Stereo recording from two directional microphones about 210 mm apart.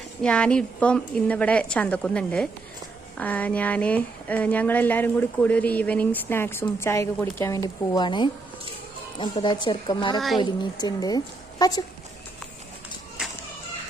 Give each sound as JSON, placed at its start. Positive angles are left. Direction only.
{"t": 0.2, "sound": "a woman's voice", "side_deg": 5}
{"t": 10.2, "sound": "a woman's voice", "side_deg": 0}
{"t": 10.4, "sound": "speech", "side_deg": 20}